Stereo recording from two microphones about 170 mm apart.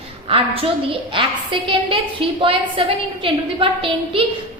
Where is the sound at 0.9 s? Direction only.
30° right (ahead or behind).